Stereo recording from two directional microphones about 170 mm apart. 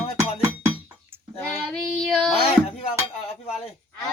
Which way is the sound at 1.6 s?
5° right (ahead or behind).